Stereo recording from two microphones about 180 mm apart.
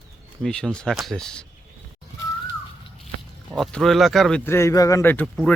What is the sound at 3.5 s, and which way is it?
Speech, 5° left (ahead or behind).